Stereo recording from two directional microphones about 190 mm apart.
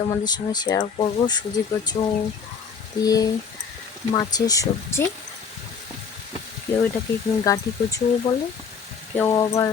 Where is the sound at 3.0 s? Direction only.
20° left (ahead or behind).